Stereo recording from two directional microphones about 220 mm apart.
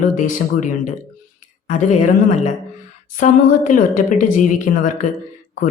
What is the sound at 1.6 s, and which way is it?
Speech, 35° left (ahead or behind).